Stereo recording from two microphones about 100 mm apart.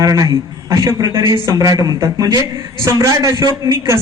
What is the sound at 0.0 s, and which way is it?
A man's voice, 35° right (ahead or behind).